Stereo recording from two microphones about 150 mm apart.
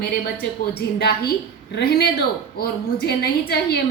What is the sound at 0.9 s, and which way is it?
Speech, 90° left.